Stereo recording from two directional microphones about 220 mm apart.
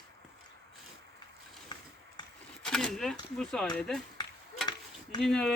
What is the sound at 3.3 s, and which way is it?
Speech, 5° left (ahead or behind).